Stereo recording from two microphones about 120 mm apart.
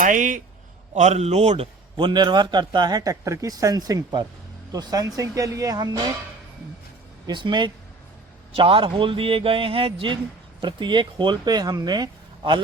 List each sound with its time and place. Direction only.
0.0 s speech: 90° right
0.9 s a man's voice: 70° right (ahead or behind)
2.0 s speech: 40° right (ahead or behind)
7.3 s a man's voice: 40° right (ahead or behind)